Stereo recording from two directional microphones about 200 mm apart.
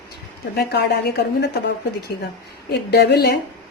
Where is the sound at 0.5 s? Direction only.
55° left (ahead or behind).